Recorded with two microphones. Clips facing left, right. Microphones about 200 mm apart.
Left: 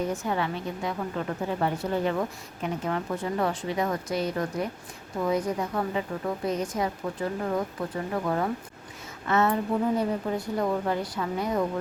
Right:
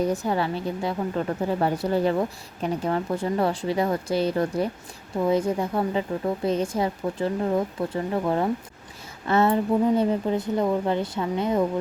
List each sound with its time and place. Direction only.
0.0 s a woman's voice: 35° right (ahead or behind)